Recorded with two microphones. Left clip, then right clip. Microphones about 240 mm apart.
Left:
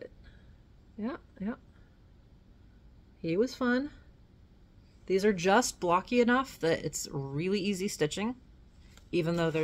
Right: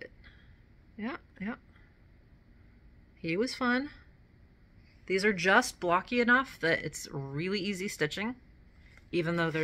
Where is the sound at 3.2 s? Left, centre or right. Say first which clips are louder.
Left 1 dB; centre.